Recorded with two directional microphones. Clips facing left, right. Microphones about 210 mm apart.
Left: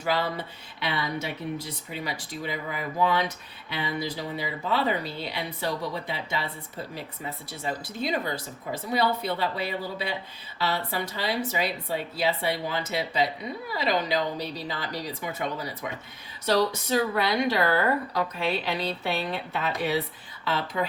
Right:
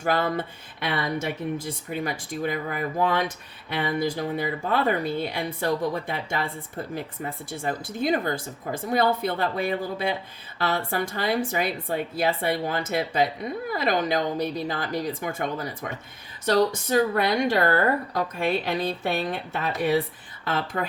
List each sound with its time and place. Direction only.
0.0 s speech: 50° right (ahead or behind)